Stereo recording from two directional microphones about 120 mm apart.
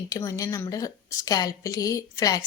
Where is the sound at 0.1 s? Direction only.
30° left (ahead or behind).